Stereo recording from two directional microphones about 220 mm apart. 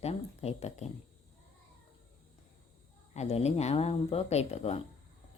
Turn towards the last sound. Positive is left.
turn(degrees=30)  # may be behind; listen again after turning